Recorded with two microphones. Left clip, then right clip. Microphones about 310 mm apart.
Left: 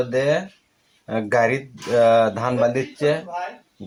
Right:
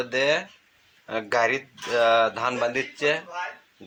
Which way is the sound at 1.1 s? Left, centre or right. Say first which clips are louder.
Left 4 dB; left.